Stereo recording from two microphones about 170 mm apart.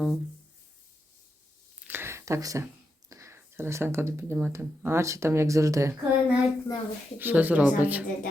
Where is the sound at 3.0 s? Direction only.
15° right (ahead or behind).